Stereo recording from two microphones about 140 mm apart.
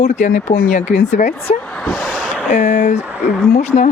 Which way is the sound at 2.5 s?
55° left (ahead or behind).